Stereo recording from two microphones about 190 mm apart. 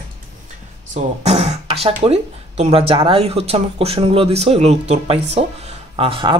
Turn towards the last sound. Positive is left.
turn(degrees=-25)  # may be behind; listen again after turning